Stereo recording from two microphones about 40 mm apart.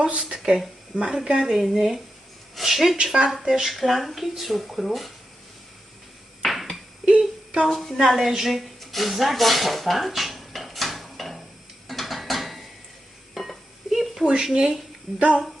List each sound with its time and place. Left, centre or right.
0.0 s speech: right
0.3 s a sound: centre
1.1 s a woman's voice: centre
3.0 s speech: right
3.4 s a woman's voice: centre
3.7 s speech: centre
6.5 s a sound: centre
7.0 s a sound: right
7.7 s speech: centre
10.2 s a sound: centre
11.9 s mechanisms: centre
13.3 s dishes: centre
15.2 s a woman's voice: right